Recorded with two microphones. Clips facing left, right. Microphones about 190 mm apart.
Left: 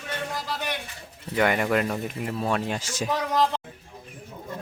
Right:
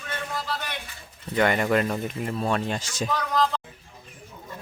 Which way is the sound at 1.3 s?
5° left (ahead or behind).